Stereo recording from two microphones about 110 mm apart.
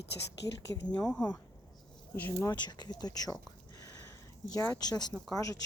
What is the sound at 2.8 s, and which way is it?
Speech, 40° left (ahead or behind).